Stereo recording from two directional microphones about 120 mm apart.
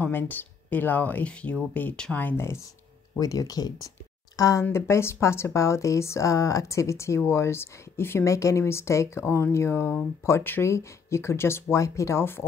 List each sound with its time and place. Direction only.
0.0 s speech: 15° left (ahead or behind)
3.2 s speech: 30° left (ahead or behind)